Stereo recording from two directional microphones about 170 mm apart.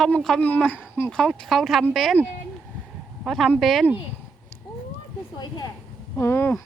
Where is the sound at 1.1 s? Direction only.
5° left (ahead or behind).